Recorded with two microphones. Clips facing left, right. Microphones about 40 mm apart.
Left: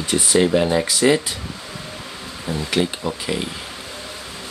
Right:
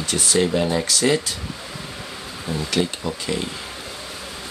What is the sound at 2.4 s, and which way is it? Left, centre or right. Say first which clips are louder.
Speech: left 2 dB; centre.